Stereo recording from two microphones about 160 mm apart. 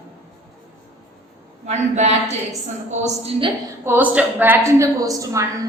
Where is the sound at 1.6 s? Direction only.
45° right (ahead or behind).